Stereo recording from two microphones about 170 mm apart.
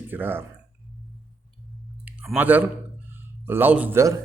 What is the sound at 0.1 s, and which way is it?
Speech, 10° right (ahead or behind).